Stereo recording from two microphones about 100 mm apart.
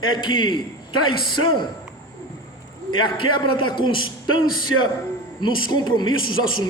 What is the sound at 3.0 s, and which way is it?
A man's voice, 55° left (ahead or behind).